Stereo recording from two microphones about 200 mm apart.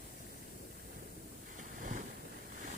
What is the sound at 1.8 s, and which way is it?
Boat, 45° right (ahead or behind).